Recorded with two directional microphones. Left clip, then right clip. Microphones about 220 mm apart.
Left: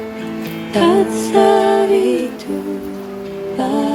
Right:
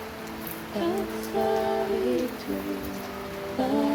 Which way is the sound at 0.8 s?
45° left (ahead or behind).